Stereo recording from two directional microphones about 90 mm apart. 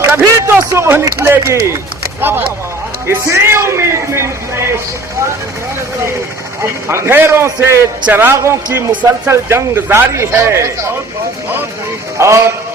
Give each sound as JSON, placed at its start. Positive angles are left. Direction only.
{"t": 0.0, "sound": "a sound", "side_deg": -30}
{"t": 0.7, "sound": "speech", "side_deg": -30}
{"t": 3.1, "sound": "a man's voice", "side_deg": -30}
{"t": 6.8, "sound": "a man's voice", "side_deg": -30}
{"t": 8.9, "sound": "speech", "side_deg": -15}
{"t": 9.3, "sound": "a man's voice", "side_deg": -30}
{"t": 12.2, "sound": "a man's voice", "side_deg": -30}